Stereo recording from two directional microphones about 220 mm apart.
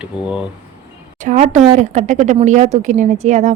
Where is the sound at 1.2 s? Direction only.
35° right (ahead or behind).